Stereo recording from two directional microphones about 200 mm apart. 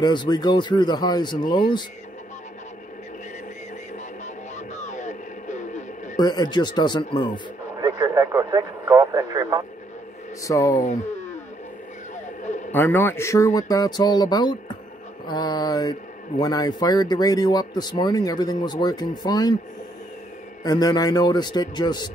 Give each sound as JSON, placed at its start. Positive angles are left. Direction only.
{"t": 0.0, "sound": "speech", "side_deg": 20}
{"t": 3.9, "sound": "music", "side_deg": 35}
{"t": 6.1, "sound": "speech", "side_deg": 20}
{"t": 7.8, "sound": "speech", "side_deg": -20}
{"t": 10.4, "sound": "speech", "side_deg": 15}
{"t": 12.7, "sound": "speech", "side_deg": 10}
{"t": 20.6, "sound": "speech", "side_deg": 20}